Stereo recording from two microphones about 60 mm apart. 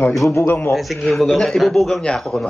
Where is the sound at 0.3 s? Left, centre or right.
Left.